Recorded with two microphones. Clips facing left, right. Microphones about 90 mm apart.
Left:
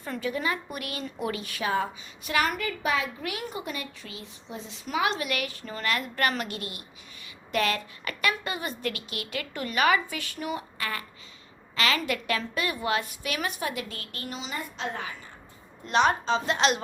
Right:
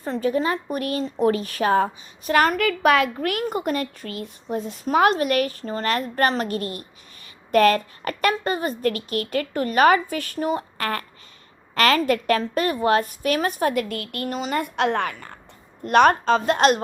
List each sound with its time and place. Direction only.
0.0 s a woman's voice: 40° right (ahead or behind)
2.6 s a woman's voice: 75° right (ahead or behind); by 10.8 s 40° right (ahead or behind)
11.7 s a woman's voice: 50° right (ahead or behind)